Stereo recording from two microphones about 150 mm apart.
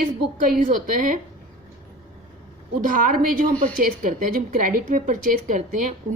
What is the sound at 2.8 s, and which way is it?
A woman's voice, 60° right (ahead or behind).